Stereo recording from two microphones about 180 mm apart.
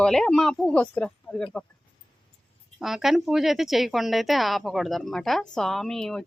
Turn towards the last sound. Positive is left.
turn(degrees=5)  # may be behind; listen again after turning